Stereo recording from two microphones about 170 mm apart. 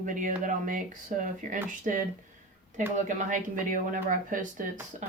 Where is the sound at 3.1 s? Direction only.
50° right (ahead or behind).